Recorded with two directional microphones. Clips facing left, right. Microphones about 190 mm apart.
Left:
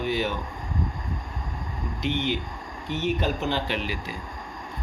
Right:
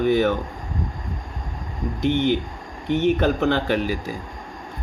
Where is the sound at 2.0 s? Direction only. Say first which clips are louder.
Right 7 dB; 50° right (ahead or behind).